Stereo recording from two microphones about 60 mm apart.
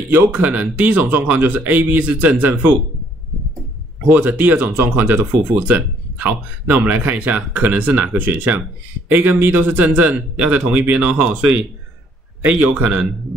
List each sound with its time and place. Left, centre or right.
0.1 s speech: right
4.1 s speech: right
12.4 s speech: right